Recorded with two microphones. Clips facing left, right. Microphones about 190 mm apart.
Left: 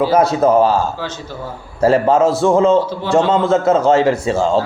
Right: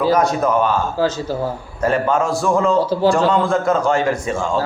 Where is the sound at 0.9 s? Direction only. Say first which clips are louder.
Right 8 dB; 40° right (ahead or behind).